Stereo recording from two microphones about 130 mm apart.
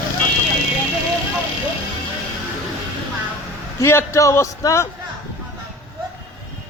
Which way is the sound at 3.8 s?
20° left (ahead or behind).